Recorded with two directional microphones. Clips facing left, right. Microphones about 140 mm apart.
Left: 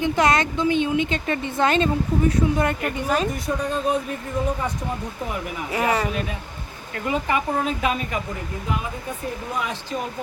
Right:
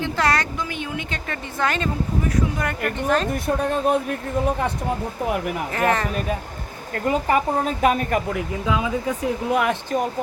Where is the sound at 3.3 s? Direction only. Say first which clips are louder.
Right 3 dB; 60° right (ahead or behind).